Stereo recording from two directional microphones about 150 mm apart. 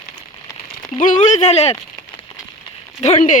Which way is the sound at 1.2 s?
50° left (ahead or behind).